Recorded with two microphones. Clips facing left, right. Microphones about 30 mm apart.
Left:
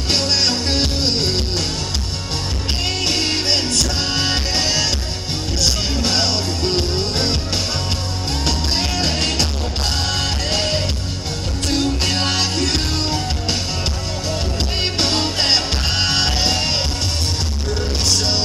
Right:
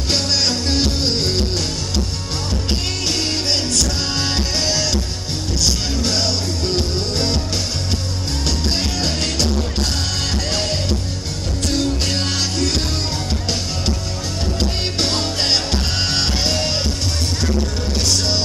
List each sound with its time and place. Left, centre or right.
0.1 s music: left
3.1 s music: left
8.9 s music: left
11.6 s music: centre
15.0 s music: centre